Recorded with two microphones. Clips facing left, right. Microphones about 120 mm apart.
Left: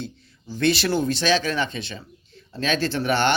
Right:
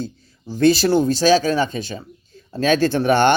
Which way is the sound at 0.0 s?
40° right (ahead or behind).